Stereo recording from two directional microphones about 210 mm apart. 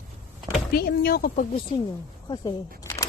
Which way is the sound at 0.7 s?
45° left (ahead or behind).